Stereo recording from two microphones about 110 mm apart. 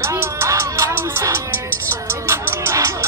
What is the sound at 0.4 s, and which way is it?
Music, 30° right (ahead or behind).